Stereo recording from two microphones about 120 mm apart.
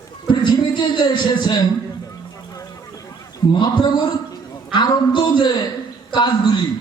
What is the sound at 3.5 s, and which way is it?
Speech, 40° left (ahead or behind).